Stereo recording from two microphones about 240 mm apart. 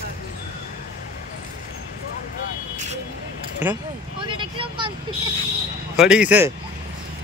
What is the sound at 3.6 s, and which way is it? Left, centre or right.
Speech, centre.